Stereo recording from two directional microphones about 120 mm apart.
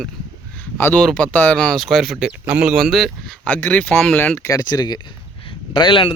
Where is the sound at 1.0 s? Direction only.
10° left (ahead or behind).